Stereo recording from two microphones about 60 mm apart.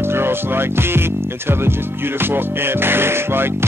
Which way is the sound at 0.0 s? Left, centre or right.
Right.